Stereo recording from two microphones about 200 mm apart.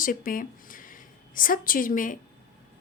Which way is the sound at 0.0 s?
45° left (ahead or behind).